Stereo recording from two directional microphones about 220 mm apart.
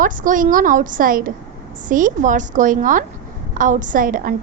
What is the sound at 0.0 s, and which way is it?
A woman's voice, 35° right (ahead or behind).